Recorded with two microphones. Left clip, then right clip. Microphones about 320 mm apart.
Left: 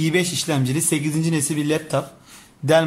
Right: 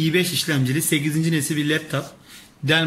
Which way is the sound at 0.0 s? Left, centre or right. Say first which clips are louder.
Even; centre.